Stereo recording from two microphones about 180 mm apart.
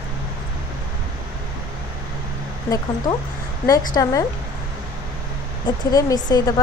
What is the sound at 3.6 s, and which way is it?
Speech, 20° left (ahead or behind).